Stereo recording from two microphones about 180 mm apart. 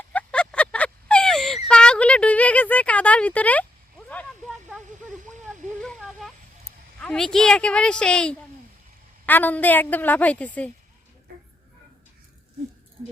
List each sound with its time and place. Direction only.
0.1 s a sound: 5° left (ahead or behind)
4.9 s speech: 45° right (ahead or behind)
5.8 s a woman's voice: centre (ahead or behind)